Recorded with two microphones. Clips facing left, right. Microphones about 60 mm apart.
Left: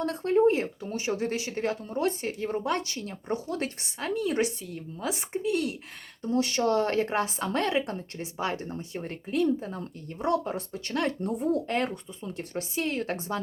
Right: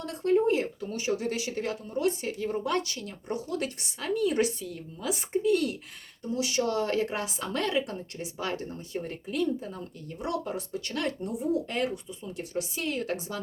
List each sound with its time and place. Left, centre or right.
0.0 s speech: left
6.3 s speech: left
11.2 s speech: left